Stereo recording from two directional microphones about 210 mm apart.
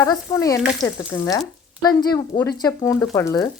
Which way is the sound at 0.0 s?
15° left (ahead or behind).